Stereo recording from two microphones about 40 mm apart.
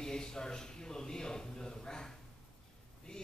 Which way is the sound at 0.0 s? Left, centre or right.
Centre.